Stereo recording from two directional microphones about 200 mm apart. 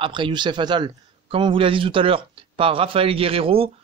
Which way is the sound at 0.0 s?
25° right (ahead or behind).